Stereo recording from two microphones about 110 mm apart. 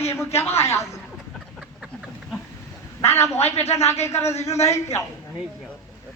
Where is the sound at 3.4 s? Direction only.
75° left (ahead or behind).